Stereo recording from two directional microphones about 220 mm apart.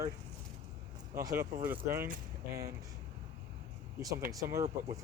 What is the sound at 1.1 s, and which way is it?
Speech, 15° right (ahead or behind).